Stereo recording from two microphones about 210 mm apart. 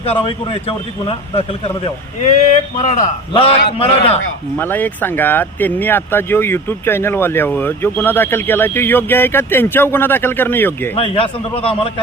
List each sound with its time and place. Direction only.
0.0 s a man's voice: 25° left (ahead or behind)
2.2 s speech: 35° left (ahead or behind)
3.3 s a man's voice: 25° left (ahead or behind)
4.5 s speech: 10° left (ahead or behind)
10.9 s a man's voice: 25° left (ahead or behind)